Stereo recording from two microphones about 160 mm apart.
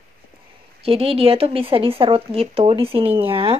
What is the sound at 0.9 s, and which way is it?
Speech, 35° right (ahead or behind).